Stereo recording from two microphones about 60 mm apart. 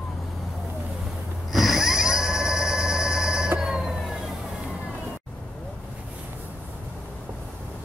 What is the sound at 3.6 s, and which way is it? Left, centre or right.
Music, centre.